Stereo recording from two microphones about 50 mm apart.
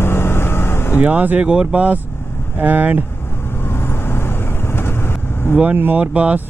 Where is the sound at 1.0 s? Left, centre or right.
Right.